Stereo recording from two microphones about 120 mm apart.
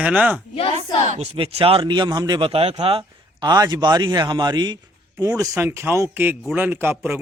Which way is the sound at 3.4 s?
35° right (ahead or behind).